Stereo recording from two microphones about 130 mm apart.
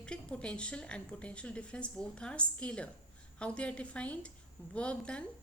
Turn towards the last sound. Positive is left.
turn(degrees=10)  # may be behind; listen again after turning